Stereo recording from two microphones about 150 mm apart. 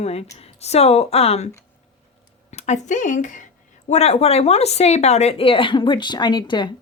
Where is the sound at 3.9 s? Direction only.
45° left (ahead or behind).